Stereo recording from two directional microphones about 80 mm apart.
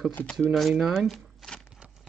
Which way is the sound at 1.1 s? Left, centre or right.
Centre.